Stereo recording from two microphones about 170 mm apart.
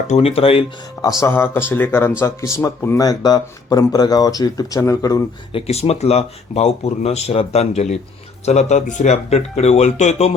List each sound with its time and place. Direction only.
0.1 s speech: 35° left (ahead or behind)
1.2 s speech: 15° left (ahead or behind)
5.5 s speech: 35° left (ahead or behind)